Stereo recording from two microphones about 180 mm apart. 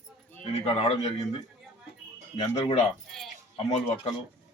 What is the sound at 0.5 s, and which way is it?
Speech, 35° left (ahead or behind).